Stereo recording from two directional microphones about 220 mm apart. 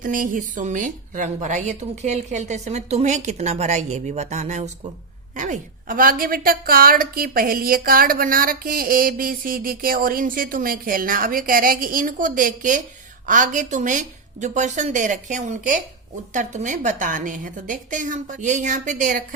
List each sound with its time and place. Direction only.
0.0 s a woman's voice: 40° right (ahead or behind)